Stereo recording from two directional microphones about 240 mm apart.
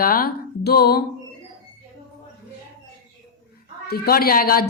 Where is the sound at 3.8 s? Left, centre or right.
Left.